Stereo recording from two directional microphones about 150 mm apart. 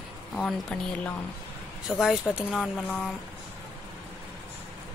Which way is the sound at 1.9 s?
5° right (ahead or behind).